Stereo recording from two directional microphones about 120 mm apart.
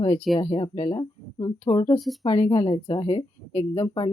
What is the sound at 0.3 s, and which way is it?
Speech, 45° left (ahead or behind).